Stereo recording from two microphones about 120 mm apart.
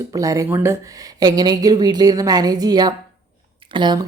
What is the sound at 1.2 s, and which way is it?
A woman's voice, 35° right (ahead or behind).